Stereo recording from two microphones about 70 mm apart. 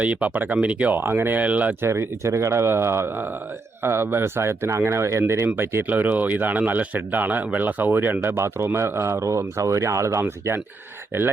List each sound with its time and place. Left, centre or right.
0.0 s speech: right
0.9 s speech: right
1.8 s speech: right
5.5 s speech: right